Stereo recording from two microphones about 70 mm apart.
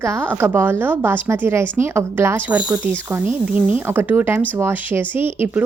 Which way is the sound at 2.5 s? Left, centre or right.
Centre.